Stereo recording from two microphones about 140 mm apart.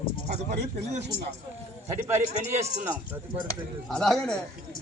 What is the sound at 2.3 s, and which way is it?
Speech, 55° right (ahead or behind).